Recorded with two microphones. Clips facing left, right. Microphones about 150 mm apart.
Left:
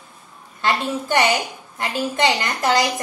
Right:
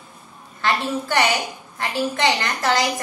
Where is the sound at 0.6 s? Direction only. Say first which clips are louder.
Left 1 dB; 20° left (ahead or behind).